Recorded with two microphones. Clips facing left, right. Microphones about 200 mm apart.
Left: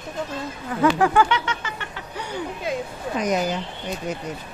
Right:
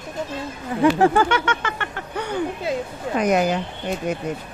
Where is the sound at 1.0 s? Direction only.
40° right (ahead or behind); by 2.4 s 55° right (ahead or behind).